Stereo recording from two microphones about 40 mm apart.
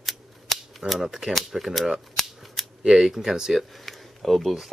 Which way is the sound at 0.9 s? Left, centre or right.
Centre.